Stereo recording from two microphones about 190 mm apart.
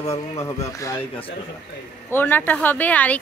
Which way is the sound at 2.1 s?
10° left (ahead or behind).